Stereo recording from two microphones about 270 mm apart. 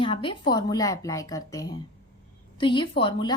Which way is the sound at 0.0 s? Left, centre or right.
Centre.